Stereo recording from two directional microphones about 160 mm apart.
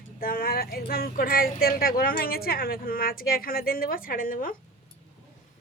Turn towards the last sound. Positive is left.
turn(degrees=60)  # may be behind; listen again after turning